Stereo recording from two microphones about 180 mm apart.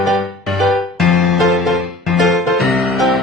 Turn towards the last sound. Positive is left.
turn(degrees=0)  # may be behind; listen again after turning